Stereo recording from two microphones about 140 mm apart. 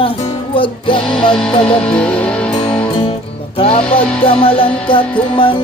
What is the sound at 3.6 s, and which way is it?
Music, 40° left (ahead or behind).